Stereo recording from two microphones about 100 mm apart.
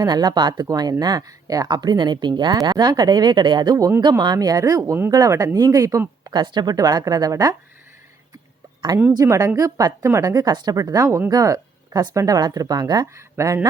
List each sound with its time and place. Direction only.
0.0 s speech: 45° right (ahead or behind)
6.2 s speech: 45° right (ahead or behind)
9.1 s speech: 30° right (ahead or behind)
13.1 s speech: 30° right (ahead or behind)